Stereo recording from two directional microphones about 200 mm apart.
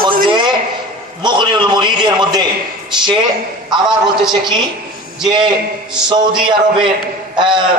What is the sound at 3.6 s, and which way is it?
Speech, 20° right (ahead or behind).